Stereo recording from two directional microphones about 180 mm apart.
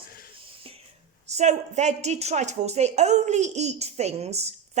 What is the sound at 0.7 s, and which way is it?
Whispering, 30° right (ahead or behind).